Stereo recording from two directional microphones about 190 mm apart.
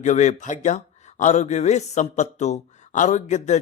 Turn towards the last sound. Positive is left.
turn(degrees=40)  # may be behind; listen again after turning